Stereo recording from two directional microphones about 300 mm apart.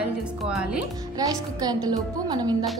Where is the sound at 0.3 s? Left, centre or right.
Centre.